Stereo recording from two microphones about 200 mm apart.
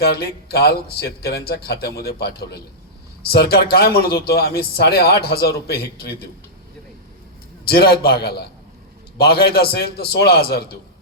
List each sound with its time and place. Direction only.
0.0 s a man's voice: 50° left (ahead or behind)
7.7 s a man's voice: 50° left (ahead or behind)